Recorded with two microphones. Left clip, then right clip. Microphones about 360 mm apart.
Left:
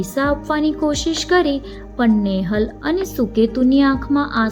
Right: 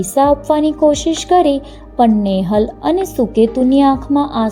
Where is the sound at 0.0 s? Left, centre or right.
Centre.